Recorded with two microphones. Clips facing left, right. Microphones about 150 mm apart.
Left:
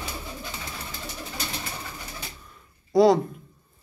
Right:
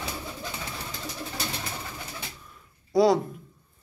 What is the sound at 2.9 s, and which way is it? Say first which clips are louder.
Speech: left 3 dB; centre (ahead or behind).